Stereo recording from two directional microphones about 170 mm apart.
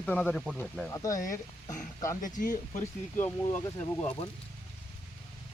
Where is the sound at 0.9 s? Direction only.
20° left (ahead or behind).